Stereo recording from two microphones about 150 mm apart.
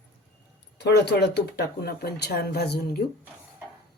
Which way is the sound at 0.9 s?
90° left.